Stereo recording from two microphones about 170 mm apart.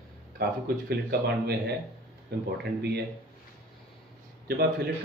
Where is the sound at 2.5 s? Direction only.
75° right (ahead or behind).